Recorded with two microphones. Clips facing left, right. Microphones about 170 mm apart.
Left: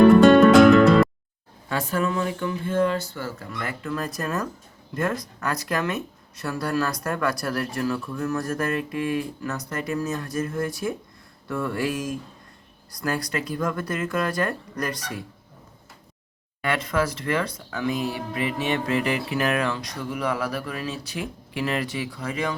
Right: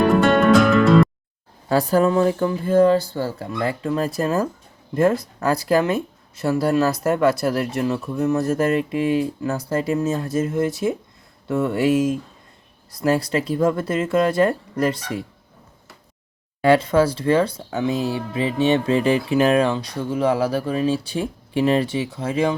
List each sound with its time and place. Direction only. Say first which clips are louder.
0.2 s music: left 3 dB; centre (ahead or behind)
1.7 s speech: right 8 dB; 35° right (ahead or behind)
16.6 s speech: right 9 dB; 30° right (ahead or behind)